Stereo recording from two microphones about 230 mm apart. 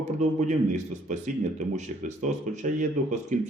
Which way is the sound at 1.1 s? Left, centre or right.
Right.